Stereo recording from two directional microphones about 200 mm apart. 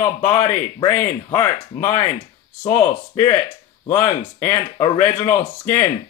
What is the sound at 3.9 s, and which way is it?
Speech, 10° left (ahead or behind).